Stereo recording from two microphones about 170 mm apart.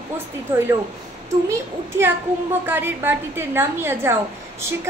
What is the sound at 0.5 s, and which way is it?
Speech, 10° right (ahead or behind).